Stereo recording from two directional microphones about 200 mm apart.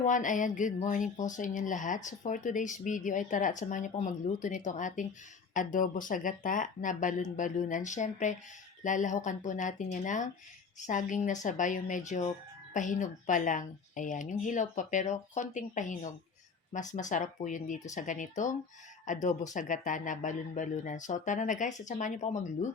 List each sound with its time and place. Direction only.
0.0 s speech: 40° left (ahead or behind)